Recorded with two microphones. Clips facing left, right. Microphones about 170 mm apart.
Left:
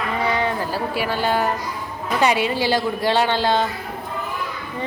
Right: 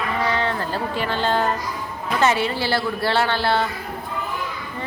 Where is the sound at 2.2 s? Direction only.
15° left (ahead or behind).